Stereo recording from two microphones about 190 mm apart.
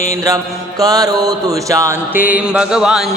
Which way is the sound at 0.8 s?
20° right (ahead or behind).